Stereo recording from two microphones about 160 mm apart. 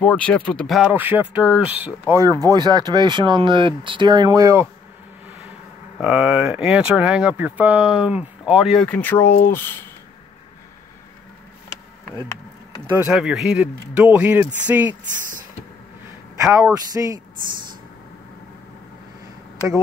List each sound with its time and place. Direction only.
0.0 s speech: 10° left (ahead or behind)
0.9 s speech: 10° right (ahead or behind)
5.9 s speech: 5° right (ahead or behind)
8.8 s speech: 10° left (ahead or behind)
13.1 s speech: 5° right (ahead or behind)
16.5 s speech: 20° right (ahead or behind)